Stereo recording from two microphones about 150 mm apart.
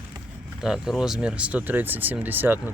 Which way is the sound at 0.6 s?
5° right (ahead or behind).